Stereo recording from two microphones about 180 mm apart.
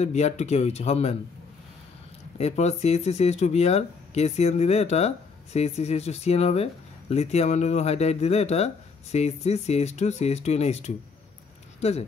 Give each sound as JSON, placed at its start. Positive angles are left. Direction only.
{"t": 0.0, "sound": "speech", "side_deg": 40}
{"t": 2.3, "sound": "speech", "side_deg": 40}